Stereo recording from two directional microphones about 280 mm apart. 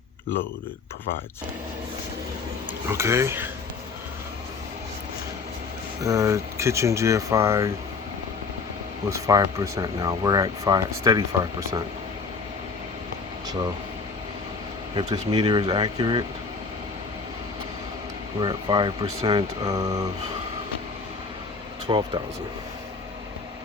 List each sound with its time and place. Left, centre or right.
2.9 s speech: centre
6.0 s speech: centre
9.0 s speech: centre
14.9 s speech: centre
18.3 s speech: centre
21.8 s speech: centre